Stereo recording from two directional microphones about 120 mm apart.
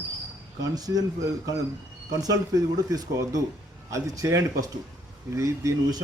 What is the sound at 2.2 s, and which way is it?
A man's voice, 30° right (ahead or behind).